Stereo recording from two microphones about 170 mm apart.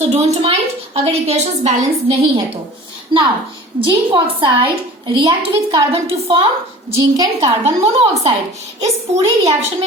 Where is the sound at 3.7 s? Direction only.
30° right (ahead or behind).